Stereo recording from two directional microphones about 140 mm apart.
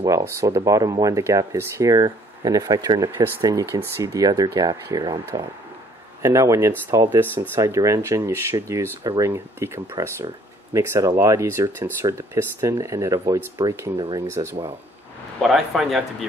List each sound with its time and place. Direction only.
0.0 s speech: 25° right (ahead or behind)
13.9 s speech: 35° right (ahead or behind)
14.3 s speech: 20° right (ahead or behind)
15.4 s speech: centre (ahead or behind)